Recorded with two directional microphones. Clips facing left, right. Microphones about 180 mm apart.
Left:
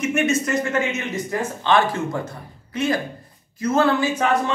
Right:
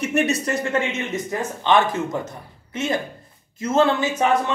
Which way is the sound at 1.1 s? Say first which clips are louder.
Left 1 dB; 20° right (ahead or behind).